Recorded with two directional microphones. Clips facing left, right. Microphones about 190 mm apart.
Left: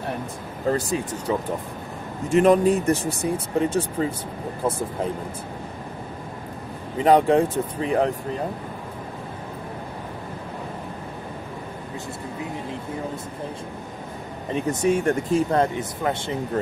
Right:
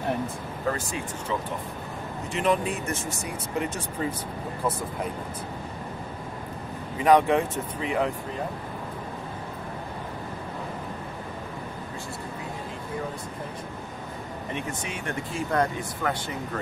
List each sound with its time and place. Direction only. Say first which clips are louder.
0.7 s speech: left 7 dB; 40° left (ahead or behind)
7.1 s speech: left 3 dB; 35° left (ahead or behind)
14.5 s speech: left 13 dB; 40° left (ahead or behind)
15.5 s speech: left 4 dB; 25° left (ahead or behind)